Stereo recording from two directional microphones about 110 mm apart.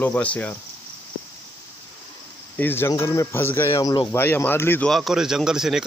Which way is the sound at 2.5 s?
20° left (ahead or behind).